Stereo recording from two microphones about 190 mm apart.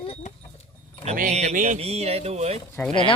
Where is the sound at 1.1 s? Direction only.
35° right (ahead or behind).